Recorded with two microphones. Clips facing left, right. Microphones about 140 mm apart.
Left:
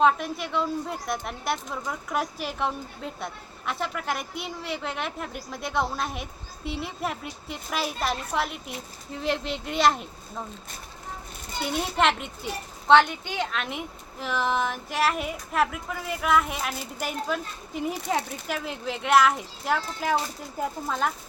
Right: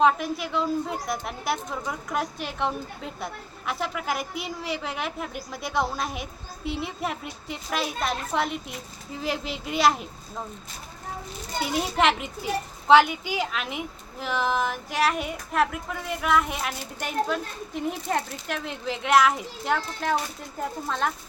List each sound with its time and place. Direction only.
0.0 s a woman's voice: centre (ahead or behind)
11.6 s a woman's voice: centre (ahead or behind)